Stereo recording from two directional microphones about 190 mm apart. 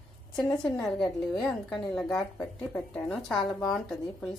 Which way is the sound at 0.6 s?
5° left (ahead or behind).